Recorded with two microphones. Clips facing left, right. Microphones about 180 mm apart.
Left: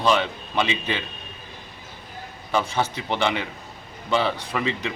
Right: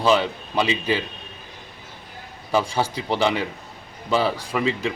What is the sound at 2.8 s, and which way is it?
Speech, 35° right (ahead or behind).